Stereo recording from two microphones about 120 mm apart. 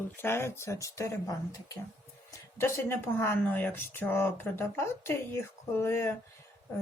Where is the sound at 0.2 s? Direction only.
20° left (ahead or behind).